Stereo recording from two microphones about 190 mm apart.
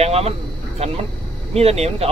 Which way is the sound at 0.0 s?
35° right (ahead or behind).